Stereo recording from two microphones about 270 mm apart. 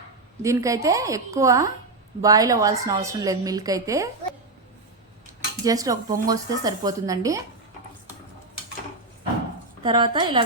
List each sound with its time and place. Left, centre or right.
0.4 s a woman's voice: centre
5.2 s cutlery: centre
6.2 s a woman's voice: centre
9.8 s a woman's voice: centre